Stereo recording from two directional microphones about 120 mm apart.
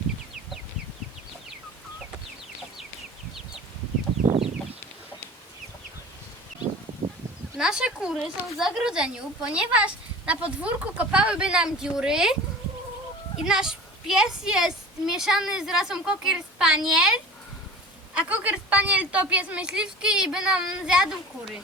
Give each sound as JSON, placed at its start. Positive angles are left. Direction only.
{"t": 4.3, "sound": "a sound", "side_deg": -50}
{"t": 7.5, "sound": "a woman's voice", "side_deg": -5}
{"t": 13.5, "sound": "a woman's voice", "side_deg": -5}
{"t": 18.1, "sound": "a woman's voice", "side_deg": -10}